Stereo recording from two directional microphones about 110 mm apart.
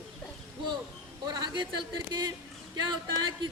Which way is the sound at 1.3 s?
40° right (ahead or behind).